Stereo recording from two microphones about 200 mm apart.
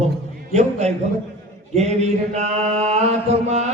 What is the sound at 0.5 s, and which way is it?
Mantra, 35° right (ahead or behind).